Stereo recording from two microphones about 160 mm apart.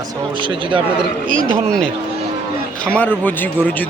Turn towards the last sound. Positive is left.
turn(degrees=10)  # may be behind; listen again after turning